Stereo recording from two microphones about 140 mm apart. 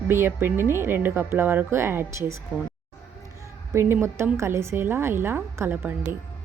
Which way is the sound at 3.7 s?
15° right (ahead or behind).